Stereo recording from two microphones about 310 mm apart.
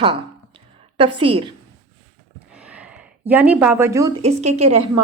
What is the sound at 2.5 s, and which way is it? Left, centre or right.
Speech, centre.